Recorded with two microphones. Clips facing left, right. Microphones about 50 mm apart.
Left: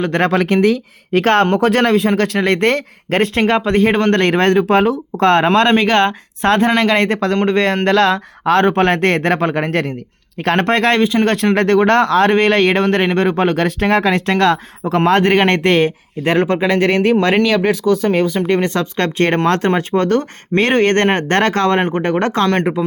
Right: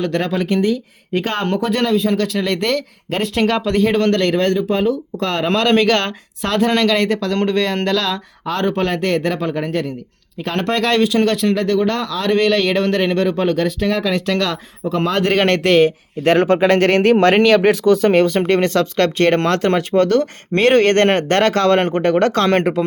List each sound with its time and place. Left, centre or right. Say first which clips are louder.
0.0 s speech: left 4 dB; left
3.4 s speech: even; left
5.5 s speech: left 3 dB; left
10.3 s speech: left 5 dB; left
11.3 s speech: left 3 dB; left
15.4 s speech: left 1 dB; left
17.6 s speech: right 2 dB; centre
18.7 s speech: right 2 dB; left
21.8 s speech: right 1 dB; centre